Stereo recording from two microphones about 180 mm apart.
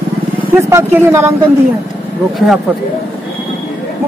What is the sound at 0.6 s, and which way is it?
Speech, 15° right (ahead or behind).